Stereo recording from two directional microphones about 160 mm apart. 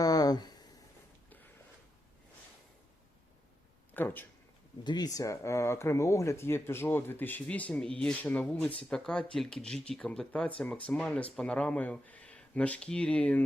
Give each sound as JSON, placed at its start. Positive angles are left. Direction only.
{"t": 0.0, "sound": "a sound", "side_deg": 25}
{"t": 3.9, "sound": "speech", "side_deg": 10}
{"t": 4.8, "sound": "speech", "side_deg": 25}